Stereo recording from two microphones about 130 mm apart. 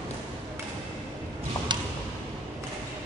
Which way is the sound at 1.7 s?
35° right (ahead or behind).